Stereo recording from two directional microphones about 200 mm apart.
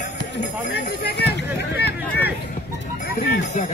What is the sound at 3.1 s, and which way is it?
Speech, 60° left (ahead or behind).